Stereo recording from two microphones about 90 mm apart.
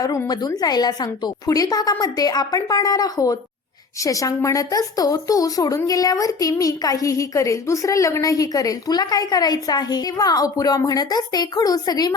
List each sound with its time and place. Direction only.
0.3 s a woman's voice: 45° left (ahead or behind)